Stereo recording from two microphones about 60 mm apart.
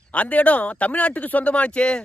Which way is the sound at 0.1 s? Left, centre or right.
Left.